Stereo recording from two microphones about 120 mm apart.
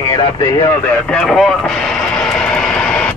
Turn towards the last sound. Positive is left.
turn(degrees=5)  # may be behind; listen again after turning